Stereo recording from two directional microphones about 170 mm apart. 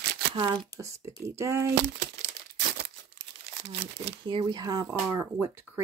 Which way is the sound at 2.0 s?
85° right.